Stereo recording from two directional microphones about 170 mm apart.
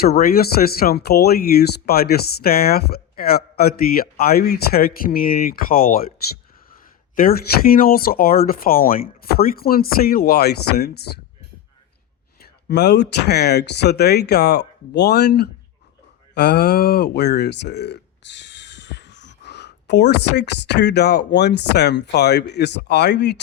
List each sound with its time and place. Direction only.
0.0 s speech: 65° left (ahead or behind)
7.2 s speech: 60° left (ahead or behind)
12.4 s speech: 70° left (ahead or behind)